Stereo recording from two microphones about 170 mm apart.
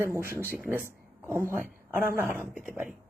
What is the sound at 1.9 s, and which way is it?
Speech, 55° right (ahead or behind).